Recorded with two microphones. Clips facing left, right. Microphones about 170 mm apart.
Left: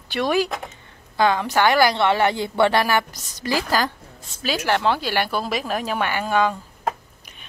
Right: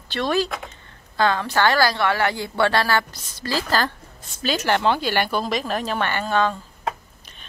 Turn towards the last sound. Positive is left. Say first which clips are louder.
# left 1 dB
turn(degrees=10)  # may be behind; listen again after turning